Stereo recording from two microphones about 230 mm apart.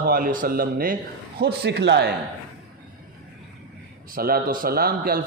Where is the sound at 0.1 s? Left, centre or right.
Right.